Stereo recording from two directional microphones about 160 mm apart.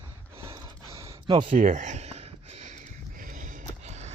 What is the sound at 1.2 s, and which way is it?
Speech, 30° right (ahead or behind).